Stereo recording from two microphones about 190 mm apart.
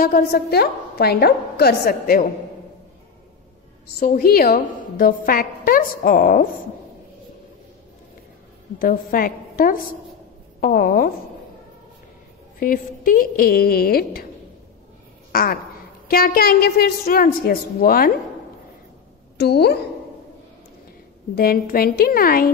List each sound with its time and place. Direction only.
0.0 s a woman's voice: 55° left (ahead or behind)
3.8 s a woman's voice: 50° left (ahead or behind)
8.7 s a woman's voice: 50° left (ahead or behind)
12.5 s a woman's voice: 45° left (ahead or behind)
15.3 s a woman's voice: 50° left (ahead or behind)
19.3 s a woman's voice: 60° left (ahead or behind)
21.4 s a woman's voice: 50° left (ahead or behind)